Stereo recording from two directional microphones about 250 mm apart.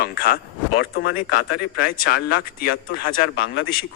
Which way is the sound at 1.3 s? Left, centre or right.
Left.